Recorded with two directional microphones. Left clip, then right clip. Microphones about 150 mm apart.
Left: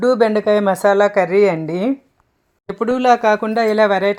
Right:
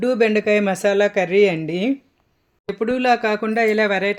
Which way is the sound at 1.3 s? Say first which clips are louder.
Left 2 dB; 25° right (ahead or behind).